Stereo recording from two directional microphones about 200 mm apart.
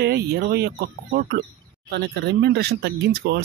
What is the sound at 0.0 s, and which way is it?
Speech, 55° right (ahead or behind).